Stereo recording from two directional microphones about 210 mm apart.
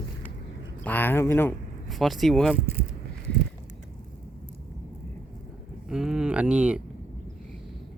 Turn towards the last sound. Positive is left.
turn(degrees=-5)  # may be behind; listen again after turning